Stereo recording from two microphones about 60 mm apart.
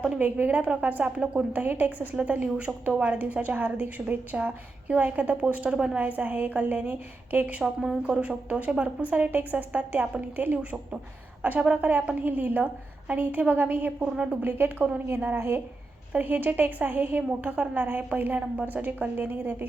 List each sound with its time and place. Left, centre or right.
0.1 s speech: right
1.5 s a woman's voice: right
6.0 s speech: right
7.6 s a woman's voice: centre
8.0 s speech: right
14.0 s speech: centre
14.4 s a woman's voice: right